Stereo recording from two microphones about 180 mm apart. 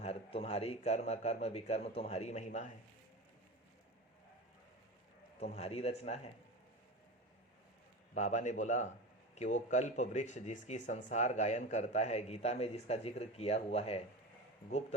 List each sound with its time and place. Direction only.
0.0 s speech: 35° left (ahead or behind)
5.4 s speech: 35° left (ahead or behind)
8.1 s a man's voice: 40° left (ahead or behind)